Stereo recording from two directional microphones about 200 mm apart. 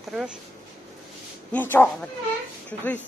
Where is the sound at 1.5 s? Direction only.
10° left (ahead or behind).